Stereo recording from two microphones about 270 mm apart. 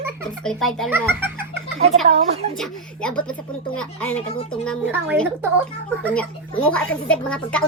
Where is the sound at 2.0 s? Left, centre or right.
Right.